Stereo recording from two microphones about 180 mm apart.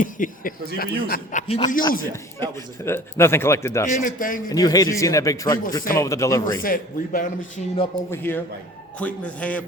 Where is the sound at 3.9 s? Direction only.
50° left (ahead or behind).